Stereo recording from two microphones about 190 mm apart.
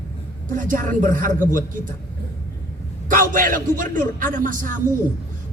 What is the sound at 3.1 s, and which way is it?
Speech, 45° right (ahead or behind).